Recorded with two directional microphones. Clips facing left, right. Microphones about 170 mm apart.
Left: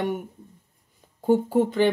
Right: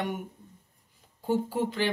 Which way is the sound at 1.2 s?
50° left (ahead or behind).